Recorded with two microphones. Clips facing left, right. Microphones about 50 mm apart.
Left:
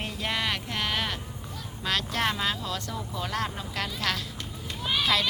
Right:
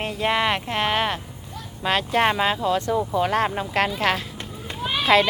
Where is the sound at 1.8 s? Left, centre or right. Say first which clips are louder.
Right 8 dB; right.